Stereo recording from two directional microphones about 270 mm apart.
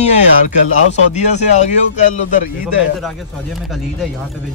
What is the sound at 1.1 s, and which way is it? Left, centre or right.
Speech, left.